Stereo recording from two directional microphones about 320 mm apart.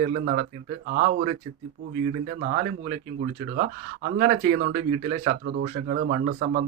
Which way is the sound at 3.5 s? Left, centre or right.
Right.